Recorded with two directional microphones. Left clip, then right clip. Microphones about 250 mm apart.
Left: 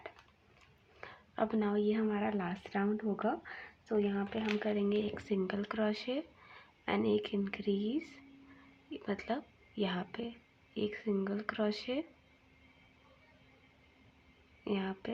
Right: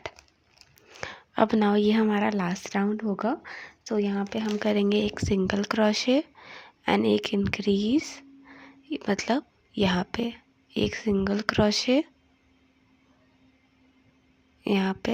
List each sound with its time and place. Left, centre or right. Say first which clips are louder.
0.9 s a woman's voice: right 12 dB; right
14.6 s speech: right 11 dB; right